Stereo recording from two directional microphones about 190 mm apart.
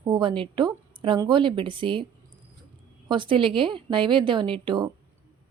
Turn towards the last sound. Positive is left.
turn(degrees=-25)  # may be behind; listen again after turning